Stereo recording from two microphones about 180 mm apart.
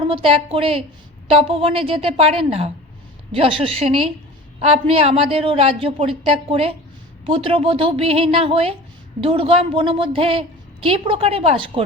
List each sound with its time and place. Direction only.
0.0 s a woman's voice: 30° right (ahead or behind)